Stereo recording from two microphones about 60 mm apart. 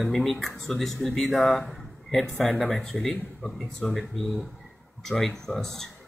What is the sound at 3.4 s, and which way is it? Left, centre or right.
Speech, left.